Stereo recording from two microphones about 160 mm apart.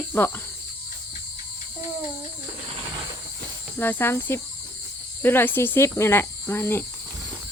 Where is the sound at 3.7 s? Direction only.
10° left (ahead or behind).